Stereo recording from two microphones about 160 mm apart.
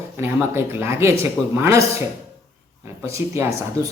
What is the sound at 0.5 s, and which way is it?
A woman's voice, 15° right (ahead or behind).